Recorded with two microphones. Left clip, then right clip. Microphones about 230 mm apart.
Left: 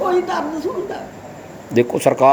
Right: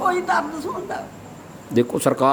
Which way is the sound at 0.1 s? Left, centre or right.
Right.